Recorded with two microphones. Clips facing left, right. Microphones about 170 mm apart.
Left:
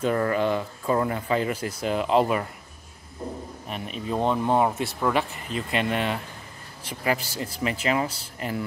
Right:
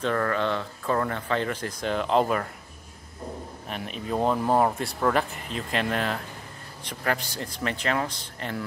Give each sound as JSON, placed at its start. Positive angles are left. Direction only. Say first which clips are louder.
{"t": 0.0, "sound": "speech", "louder": "left 2 dB", "side_deg": 10}
{"t": 3.6, "sound": "speech", "louder": "left 1 dB", "side_deg": 0}